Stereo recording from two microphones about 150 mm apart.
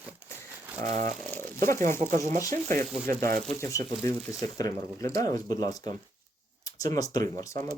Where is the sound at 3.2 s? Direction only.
70° right (ahead or behind).